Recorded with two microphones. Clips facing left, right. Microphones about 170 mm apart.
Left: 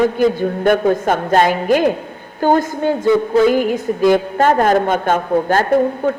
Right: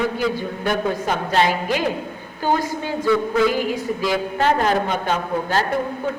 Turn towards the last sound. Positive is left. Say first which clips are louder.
# left 8 dB
turn(degrees=50)  # may be behind; listen again after turning